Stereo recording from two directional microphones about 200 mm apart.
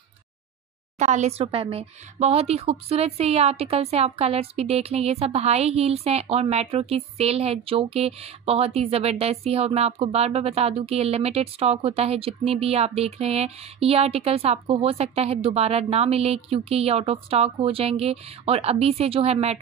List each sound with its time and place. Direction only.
0.9 s a woman's voice: 35° right (ahead or behind)